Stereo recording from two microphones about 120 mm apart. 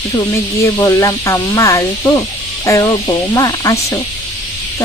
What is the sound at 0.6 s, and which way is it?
Speech, 25° left (ahead or behind).